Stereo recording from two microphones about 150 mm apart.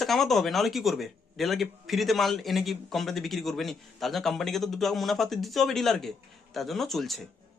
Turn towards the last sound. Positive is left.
turn(degrees=0)  # may be behind; listen again after turning